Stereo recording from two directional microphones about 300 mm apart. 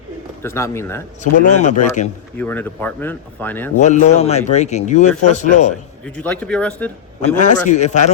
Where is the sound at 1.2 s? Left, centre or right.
Left.